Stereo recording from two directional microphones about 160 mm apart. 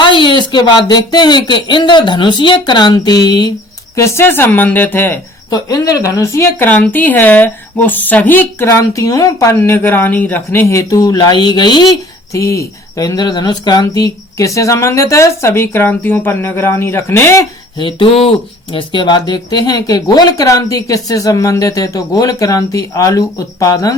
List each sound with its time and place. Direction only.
0.0 s speech: 30° left (ahead or behind); by 17.4 s 15° left (ahead or behind)
17.7 s speech: 30° left (ahead or behind)